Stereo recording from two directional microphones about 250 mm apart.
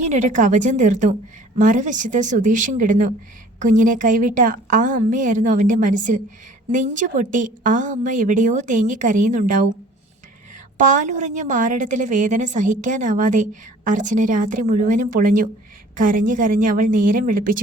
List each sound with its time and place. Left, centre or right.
0.1 s a woman's voice: right
10.8 s a woman's voice: right